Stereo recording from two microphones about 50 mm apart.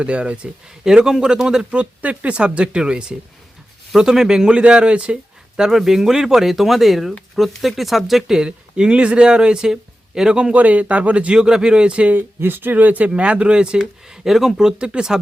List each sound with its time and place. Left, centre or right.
0.0 s speech: right
1.7 s speech: right
5.5 s speech: centre
8.4 s speech: centre
10.5 s speech: right
11.3 s speech: centre
12.4 s speech: right
12.7 s speech: right; by 15.2 s centre